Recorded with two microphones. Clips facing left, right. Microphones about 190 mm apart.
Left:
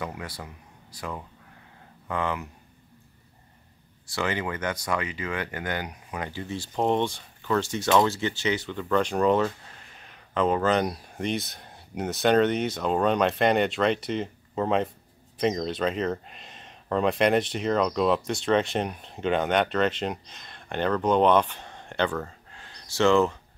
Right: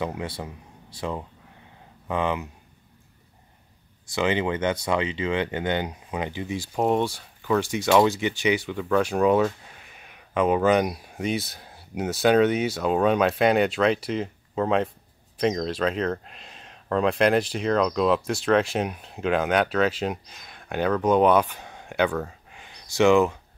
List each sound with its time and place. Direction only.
0.0 s speech: 25° right (ahead or behind)
4.1 s speech: 20° right (ahead or behind)